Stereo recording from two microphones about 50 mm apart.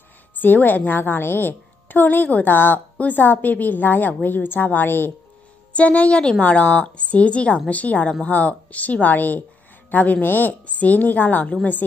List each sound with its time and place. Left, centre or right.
0.3 s a woman's voice: left
5.7 s a woman's voice: left